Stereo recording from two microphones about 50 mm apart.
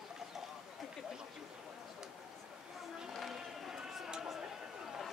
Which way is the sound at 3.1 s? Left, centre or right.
Centre.